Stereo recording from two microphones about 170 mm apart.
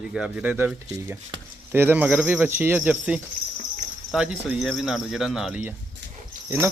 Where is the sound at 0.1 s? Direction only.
5° right (ahead or behind).